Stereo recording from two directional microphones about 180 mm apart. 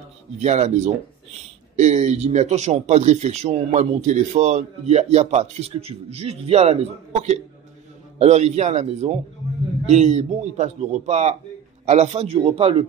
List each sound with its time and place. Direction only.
0.4 s speech: 40° right (ahead or behind)